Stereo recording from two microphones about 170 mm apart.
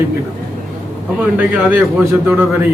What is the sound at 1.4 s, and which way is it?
A man's voice, 10° right (ahead or behind).